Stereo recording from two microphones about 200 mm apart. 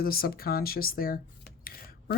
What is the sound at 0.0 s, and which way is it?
Speech, 50° left (ahead or behind).